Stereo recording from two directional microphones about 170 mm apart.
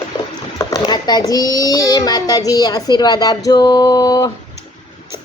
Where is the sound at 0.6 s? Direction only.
25° left (ahead or behind).